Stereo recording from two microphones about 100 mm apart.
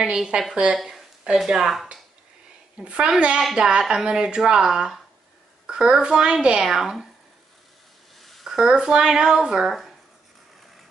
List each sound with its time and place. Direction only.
0.0 s speech: 10° right (ahead or behind)
8.2 s speech: centre (ahead or behind)